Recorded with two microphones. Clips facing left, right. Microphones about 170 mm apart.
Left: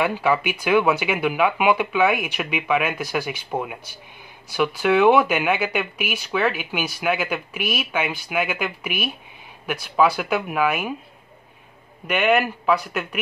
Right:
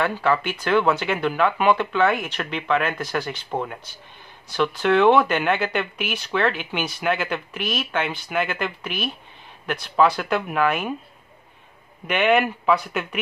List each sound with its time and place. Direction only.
0.0 s speech: 10° left (ahead or behind)
12.1 s speech: 5° left (ahead or behind)